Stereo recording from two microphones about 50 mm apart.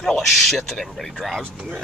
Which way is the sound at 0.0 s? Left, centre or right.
Centre.